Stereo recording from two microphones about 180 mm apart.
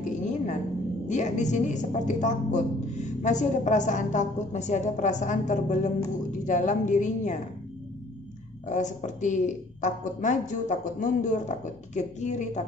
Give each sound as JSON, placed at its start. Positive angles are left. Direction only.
{"t": 0.0, "sound": "a sound", "side_deg": 40}
{"t": 1.0, "sound": "a woman's voice", "side_deg": 40}
{"t": 8.6, "sound": "a woman's voice", "side_deg": 40}